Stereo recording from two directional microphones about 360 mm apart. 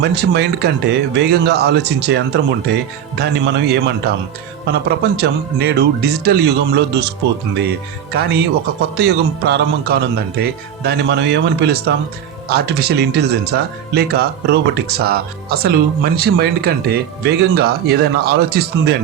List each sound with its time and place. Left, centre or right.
0.0 s speech: right